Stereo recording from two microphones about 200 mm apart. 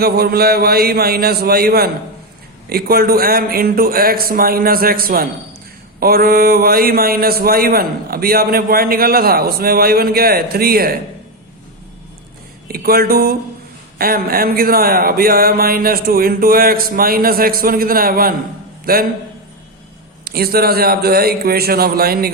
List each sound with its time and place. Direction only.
0.0 s a man's voice: 50° right (ahead or behind)
12.6 s a man's voice: 50° right (ahead or behind)
20.2 s a man's voice: 50° right (ahead or behind)